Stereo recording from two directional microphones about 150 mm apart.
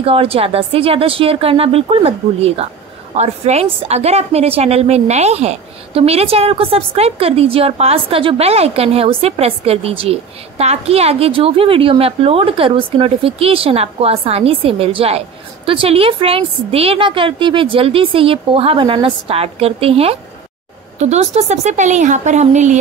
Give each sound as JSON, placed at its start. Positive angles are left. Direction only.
{"t": 0.0, "sound": "a woman's voice", "side_deg": -40}